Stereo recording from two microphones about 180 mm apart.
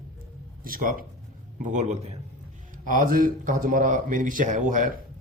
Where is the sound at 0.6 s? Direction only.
50° right (ahead or behind).